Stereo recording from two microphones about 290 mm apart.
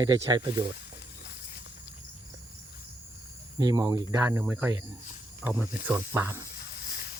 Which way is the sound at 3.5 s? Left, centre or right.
Centre.